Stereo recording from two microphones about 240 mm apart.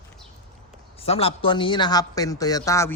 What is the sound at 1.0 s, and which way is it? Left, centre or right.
Speech, left.